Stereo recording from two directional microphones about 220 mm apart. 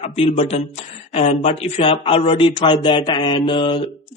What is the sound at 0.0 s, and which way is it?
A man's voice, 25° left (ahead or behind).